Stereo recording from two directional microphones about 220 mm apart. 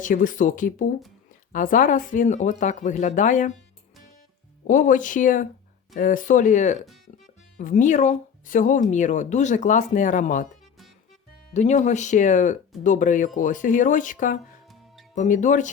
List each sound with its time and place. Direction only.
0.0 s speech: 35° left (ahead or behind)
4.6 s speech: 35° left (ahead or behind)
7.1 s music: 35° left (ahead or behind)
7.6 s speech: 35° left (ahead or behind)
11.5 s speech: 30° left (ahead or behind)